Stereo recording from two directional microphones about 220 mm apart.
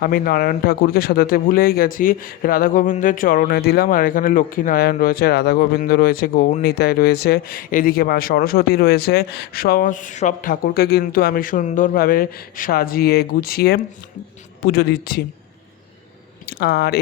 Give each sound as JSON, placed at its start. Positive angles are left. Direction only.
{"t": 0.0, "sound": "speech", "side_deg": 40}
{"t": 16.5, "sound": "speech", "side_deg": 50}